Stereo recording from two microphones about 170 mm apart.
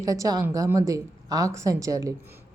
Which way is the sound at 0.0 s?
20° right (ahead or behind).